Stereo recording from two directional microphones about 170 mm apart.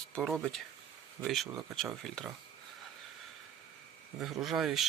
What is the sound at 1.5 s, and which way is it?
Speech, 20° right (ahead or behind).